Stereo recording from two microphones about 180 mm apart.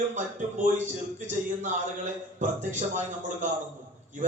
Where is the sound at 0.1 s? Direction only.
45° right (ahead or behind).